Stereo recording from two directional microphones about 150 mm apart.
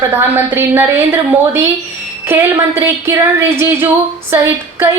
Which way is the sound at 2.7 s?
15° right (ahead or behind).